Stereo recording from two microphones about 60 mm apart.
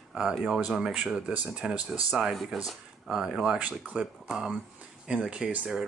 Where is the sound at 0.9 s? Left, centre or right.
Centre.